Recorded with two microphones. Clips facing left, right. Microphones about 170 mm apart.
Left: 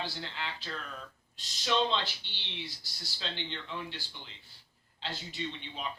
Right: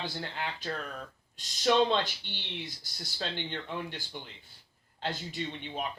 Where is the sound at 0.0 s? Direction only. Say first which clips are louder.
Right 3 dB; 50° right (ahead or behind).